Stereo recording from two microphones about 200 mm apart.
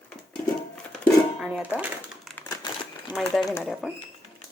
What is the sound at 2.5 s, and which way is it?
Crumpling, 20° left (ahead or behind).